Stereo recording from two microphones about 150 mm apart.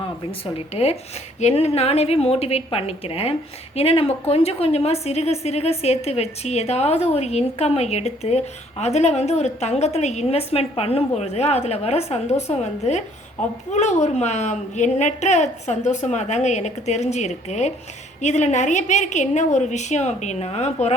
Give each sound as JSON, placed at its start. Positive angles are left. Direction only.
{"t": 0.5, "sound": "a woman's voice", "side_deg": 40}